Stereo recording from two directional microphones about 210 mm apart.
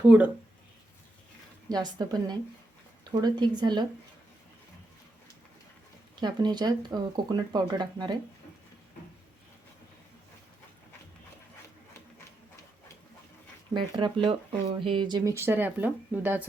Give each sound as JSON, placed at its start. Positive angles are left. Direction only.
{"t": 0.0, "sound": "speech", "side_deg": -5}
{"t": 1.8, "sound": "speech", "side_deg": -20}
{"t": 6.1, "sound": "speech", "side_deg": -20}
{"t": 13.7, "sound": "speech", "side_deg": -20}